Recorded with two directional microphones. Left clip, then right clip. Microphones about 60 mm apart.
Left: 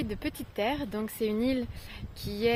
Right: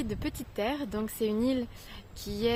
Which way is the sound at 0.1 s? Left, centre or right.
Right.